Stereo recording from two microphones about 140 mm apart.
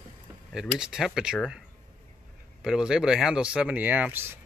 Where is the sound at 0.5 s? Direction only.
5° right (ahead or behind).